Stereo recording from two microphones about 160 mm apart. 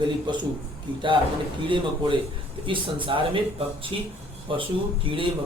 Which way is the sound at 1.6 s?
30° right (ahead or behind).